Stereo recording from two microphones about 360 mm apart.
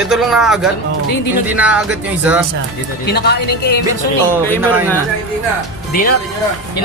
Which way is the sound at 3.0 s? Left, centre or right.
Left.